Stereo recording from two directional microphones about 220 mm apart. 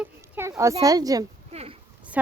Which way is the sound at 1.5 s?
30° right (ahead or behind).